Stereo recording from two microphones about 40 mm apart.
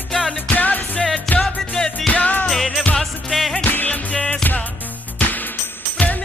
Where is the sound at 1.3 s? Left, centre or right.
Centre.